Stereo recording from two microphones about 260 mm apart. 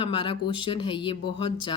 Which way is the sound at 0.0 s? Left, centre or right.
Centre.